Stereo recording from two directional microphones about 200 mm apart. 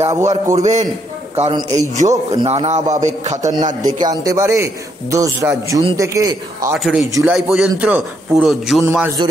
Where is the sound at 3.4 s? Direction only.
15° right (ahead or behind).